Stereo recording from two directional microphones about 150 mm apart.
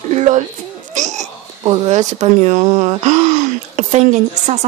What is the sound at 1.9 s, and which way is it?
Speech, 50° right (ahead or behind).